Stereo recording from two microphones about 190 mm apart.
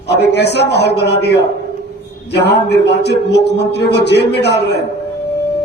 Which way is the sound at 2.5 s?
60° left (ahead or behind).